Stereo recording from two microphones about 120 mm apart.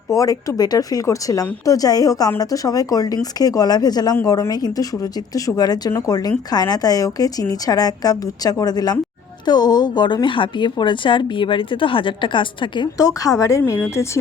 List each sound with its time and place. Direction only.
0.1 s a woman's voice: 30° left (ahead or behind)
13.0 s speech: 30° left (ahead or behind)
13.6 s a woman's voice: 15° left (ahead or behind)